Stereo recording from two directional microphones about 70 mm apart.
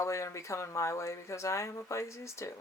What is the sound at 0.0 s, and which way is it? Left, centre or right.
Speech, left.